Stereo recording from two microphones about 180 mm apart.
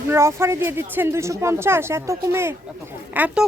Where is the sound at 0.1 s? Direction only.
15° right (ahead or behind).